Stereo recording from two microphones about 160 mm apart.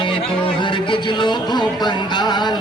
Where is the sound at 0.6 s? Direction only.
30° left (ahead or behind).